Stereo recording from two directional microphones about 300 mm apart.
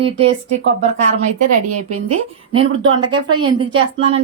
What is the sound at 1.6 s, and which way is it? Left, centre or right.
Speech, right.